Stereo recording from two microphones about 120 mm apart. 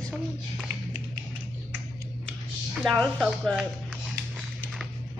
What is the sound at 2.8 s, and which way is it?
Speech, 5° left (ahead or behind).